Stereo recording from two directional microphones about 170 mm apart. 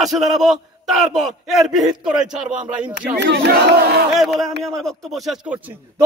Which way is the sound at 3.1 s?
75° right (ahead or behind).